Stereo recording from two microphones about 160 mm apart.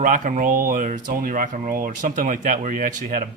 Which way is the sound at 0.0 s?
55° right (ahead or behind).